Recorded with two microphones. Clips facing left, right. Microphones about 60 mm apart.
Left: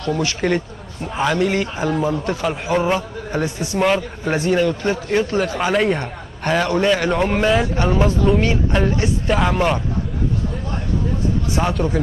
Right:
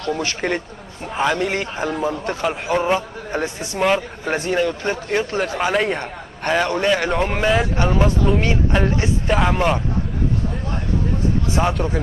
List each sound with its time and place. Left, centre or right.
0.4 s speech: centre
1.0 s a man's voice: centre
3.3 s a man's voice: right
3.8 s a man's voice: centre
11.6 s a man's voice: centre